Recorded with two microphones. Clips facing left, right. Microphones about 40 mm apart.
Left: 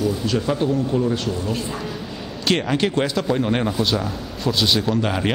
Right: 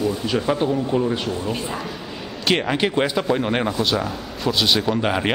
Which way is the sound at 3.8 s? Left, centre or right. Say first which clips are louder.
Even; centre.